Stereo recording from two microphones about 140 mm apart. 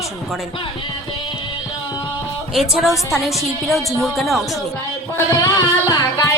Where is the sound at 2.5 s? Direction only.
Centre (ahead or behind).